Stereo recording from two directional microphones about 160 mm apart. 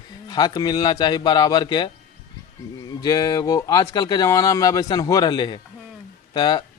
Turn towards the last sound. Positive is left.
turn(degrees=25)  # may be behind; listen again after turning